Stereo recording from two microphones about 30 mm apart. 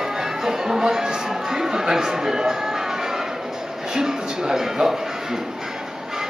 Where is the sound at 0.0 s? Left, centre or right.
Centre.